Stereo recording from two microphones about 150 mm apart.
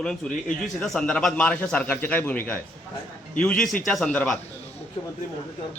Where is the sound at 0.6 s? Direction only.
5° left (ahead or behind).